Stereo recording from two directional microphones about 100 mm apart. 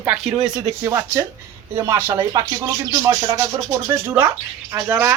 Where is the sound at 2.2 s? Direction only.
40° right (ahead or behind).